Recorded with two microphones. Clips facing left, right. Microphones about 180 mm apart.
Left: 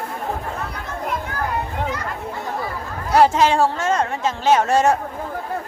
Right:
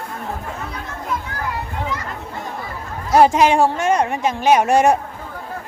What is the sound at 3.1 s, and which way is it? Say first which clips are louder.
Speech: right 2 dB; 15° right (ahead or behind).